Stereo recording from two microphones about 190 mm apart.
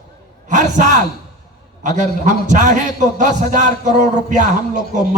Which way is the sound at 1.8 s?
40° right (ahead or behind).